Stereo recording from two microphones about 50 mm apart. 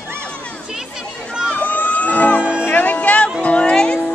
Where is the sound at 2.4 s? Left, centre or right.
Right.